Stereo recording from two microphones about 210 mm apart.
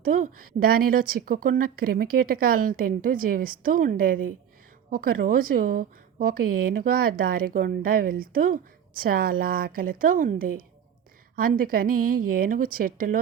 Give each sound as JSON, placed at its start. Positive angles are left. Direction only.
{"t": 0.0, "sound": "a woman's voice", "side_deg": -40}